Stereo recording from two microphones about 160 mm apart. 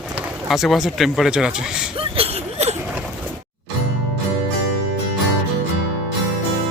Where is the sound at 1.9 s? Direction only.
35° right (ahead or behind).